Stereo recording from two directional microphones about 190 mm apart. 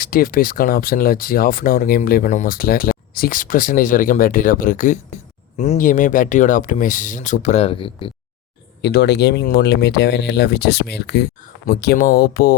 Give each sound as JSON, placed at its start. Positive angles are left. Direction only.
{"t": 0.0, "sound": "speech", "side_deg": 50}
{"t": 8.8, "sound": "speech", "side_deg": 65}